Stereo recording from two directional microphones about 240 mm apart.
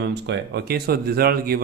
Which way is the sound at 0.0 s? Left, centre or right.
Right.